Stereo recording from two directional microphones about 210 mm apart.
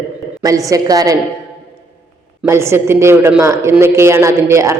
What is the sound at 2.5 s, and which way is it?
A man's voice, 10° right (ahead or behind).